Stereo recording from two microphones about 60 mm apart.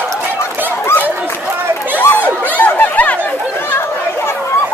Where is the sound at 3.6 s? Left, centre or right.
Left.